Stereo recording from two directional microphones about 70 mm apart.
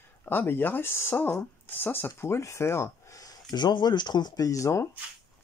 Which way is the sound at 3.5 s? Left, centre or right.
Left.